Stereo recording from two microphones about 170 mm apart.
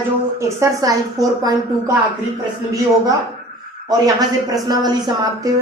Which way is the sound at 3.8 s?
20° right (ahead or behind).